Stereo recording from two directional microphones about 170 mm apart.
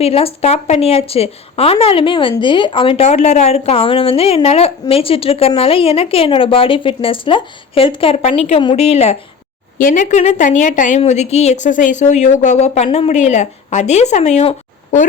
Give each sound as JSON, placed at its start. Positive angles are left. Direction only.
{"t": 0.0, "sound": "speech", "side_deg": 35}
{"t": 9.7, "sound": "a woman's voice", "side_deg": 50}